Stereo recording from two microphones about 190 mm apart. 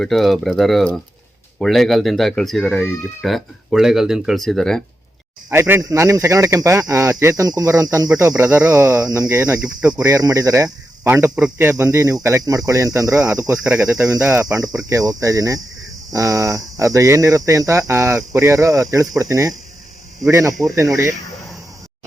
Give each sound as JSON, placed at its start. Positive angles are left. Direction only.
{"t": 0.0, "sound": "speech", "side_deg": 0}
{"t": 5.5, "sound": "speech", "side_deg": -10}
{"t": 13.7, "sound": "speech", "side_deg": -5}
{"t": 14.1, "sound": "speech", "side_deg": -15}